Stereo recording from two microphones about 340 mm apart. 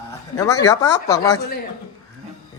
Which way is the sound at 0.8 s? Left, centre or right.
Left.